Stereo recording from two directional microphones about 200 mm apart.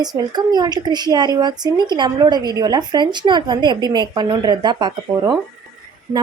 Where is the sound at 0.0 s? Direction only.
20° right (ahead or behind).